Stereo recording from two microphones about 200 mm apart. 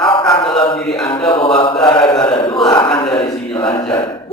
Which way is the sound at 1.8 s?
25° left (ahead or behind).